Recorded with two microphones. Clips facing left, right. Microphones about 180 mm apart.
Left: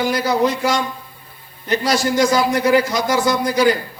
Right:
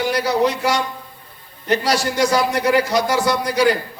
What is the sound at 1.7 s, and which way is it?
A man's voice, 65° right (ahead or behind).